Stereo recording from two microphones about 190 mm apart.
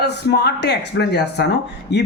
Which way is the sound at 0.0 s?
60° left (ahead or behind).